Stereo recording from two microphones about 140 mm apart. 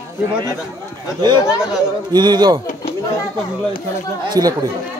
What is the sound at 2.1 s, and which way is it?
Speech, 30° right (ahead or behind).